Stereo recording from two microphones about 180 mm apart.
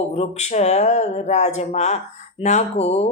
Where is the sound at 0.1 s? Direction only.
40° left (ahead or behind).